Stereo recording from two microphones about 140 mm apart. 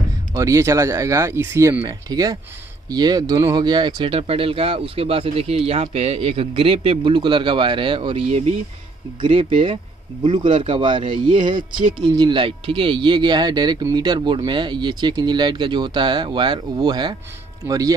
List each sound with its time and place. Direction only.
0.3 s speech: 20° right (ahead or behind)